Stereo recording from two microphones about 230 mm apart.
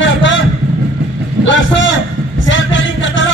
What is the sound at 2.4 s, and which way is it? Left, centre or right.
Music, left.